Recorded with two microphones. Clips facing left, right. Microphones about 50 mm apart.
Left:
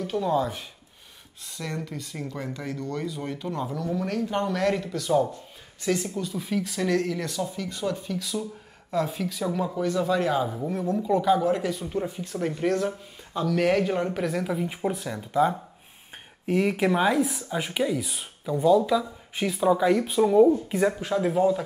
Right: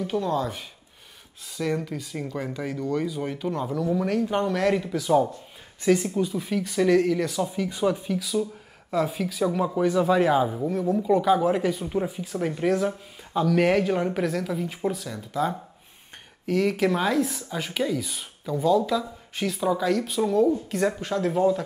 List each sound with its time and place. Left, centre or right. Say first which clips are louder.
0.2 s speech: left 1 dB; centre
6.0 s speech: right 5 dB; right
6.3 s speech: right 3 dB; centre
7.4 s speech: right 5 dB; centre
8.2 s speech: right 4 dB; centre
9.8 s speech: right 5 dB; centre
10.6 s speech: right 3 dB; centre
14.3 s speech: even; centre